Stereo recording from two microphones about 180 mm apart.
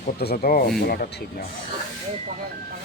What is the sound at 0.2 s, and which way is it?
Speech, 60° left (ahead or behind).